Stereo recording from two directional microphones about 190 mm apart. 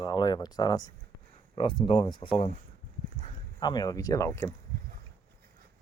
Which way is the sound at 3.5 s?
20° left (ahead or behind).